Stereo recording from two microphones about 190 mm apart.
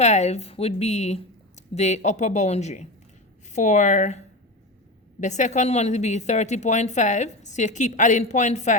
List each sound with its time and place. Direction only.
0.0 s a woman's voice: 35° left (ahead or behind)
5.2 s a woman's voice: 40° left (ahead or behind)